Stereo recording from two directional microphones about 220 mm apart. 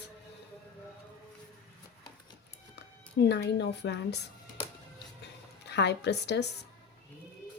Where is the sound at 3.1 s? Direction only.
50° left (ahead or behind).